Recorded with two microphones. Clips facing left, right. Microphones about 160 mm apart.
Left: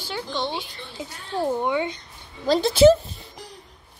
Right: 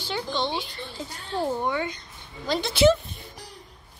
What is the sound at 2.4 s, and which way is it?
Speech, 40° left (ahead or behind).